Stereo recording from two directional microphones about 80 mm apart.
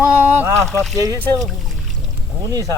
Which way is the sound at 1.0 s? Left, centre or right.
Right.